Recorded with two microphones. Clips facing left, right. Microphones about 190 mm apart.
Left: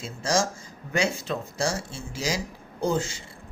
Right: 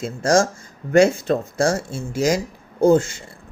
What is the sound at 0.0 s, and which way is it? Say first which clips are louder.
Speech: right 8 dB; 50° right (ahead or behind).